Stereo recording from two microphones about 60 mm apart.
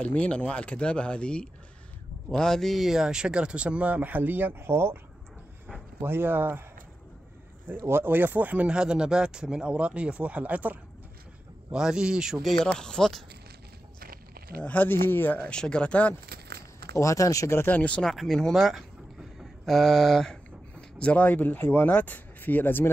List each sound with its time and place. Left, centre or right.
0.0 s speech: left; by 4.9 s right
5.9 s speech: right
7.8 s speech: right
11.7 s a man's voice: centre
12.6 s speech: centre
14.6 s speech: left
15.3 s speech: left
16.9 s speech: left
17.6 s speech: left
18.0 s speech: centre
21.0 s speech: left